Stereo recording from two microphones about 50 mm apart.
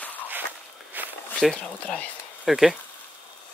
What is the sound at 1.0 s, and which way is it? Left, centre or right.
Walk, right.